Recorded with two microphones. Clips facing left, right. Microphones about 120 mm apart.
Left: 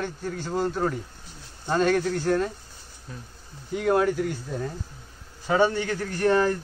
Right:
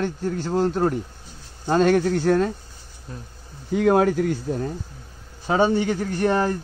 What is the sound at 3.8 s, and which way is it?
Speech, 80° right.